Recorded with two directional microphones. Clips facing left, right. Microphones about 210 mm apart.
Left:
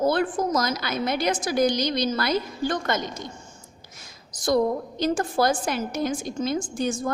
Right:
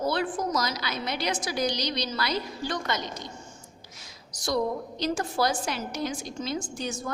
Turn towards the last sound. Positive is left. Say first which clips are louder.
# left 7 dB
turn(degrees=50)  # may be behind; listen again after turning